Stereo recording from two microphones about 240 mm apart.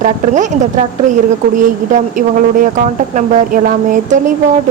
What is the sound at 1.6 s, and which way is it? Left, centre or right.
Speech, right.